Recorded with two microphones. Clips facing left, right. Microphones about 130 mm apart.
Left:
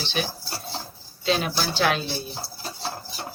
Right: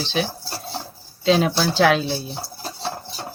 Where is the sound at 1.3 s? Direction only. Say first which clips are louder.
Right 7 dB; 90° right.